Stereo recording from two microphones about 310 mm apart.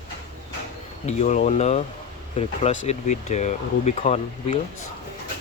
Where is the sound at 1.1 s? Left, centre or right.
Left.